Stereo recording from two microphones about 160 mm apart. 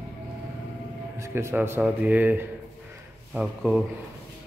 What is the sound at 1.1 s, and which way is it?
A man's voice, 15° right (ahead or behind).